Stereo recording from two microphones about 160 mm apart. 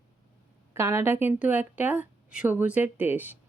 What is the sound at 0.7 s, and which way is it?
A woman's voice, 15° right (ahead or behind).